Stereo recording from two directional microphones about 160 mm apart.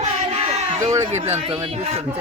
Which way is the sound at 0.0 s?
40° right (ahead or behind).